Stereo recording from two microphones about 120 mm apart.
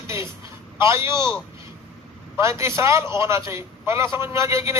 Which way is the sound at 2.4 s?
25° right (ahead or behind).